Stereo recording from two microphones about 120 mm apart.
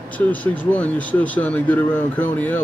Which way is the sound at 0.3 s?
10° left (ahead or behind).